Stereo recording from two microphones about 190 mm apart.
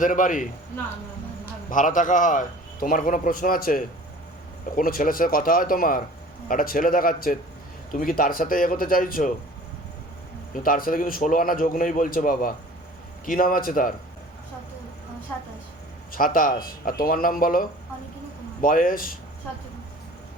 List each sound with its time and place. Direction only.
0.0 s speech: 45° left (ahead or behind)
1.7 s speech: 45° left (ahead or behind)
10.5 s speech: 50° left (ahead or behind)
16.1 s speech: 45° left (ahead or behind)